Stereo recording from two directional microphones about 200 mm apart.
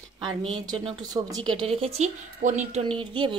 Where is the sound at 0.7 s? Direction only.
20° right (ahead or behind).